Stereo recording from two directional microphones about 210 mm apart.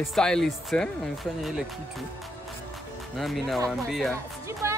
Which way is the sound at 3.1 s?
Centre (ahead or behind).